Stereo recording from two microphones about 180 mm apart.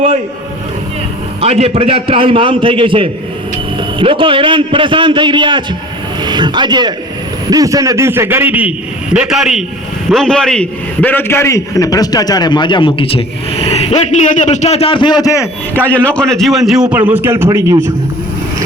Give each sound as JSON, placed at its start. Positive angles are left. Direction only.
{"t": 1.4, "sound": "a man's voice", "side_deg": -35}